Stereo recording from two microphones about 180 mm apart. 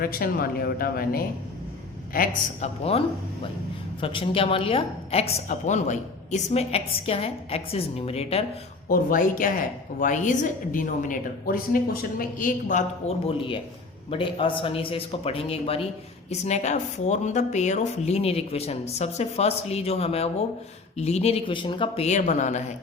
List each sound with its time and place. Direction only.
0.0 s a woman's voice: 55° left (ahead or behind)
4.0 s a woman's voice: 30° left (ahead or behind)
8.9 s a woman's voice: 50° left (ahead or behind)